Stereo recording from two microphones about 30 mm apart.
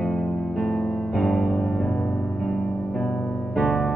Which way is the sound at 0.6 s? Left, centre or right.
Left.